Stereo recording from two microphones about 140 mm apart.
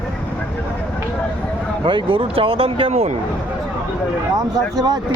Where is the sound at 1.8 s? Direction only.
40° right (ahead or behind).